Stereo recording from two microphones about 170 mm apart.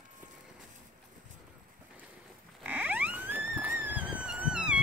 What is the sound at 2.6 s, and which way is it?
Music, 10° right (ahead or behind).